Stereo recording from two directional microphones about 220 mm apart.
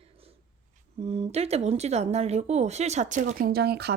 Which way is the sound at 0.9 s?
30° right (ahead or behind).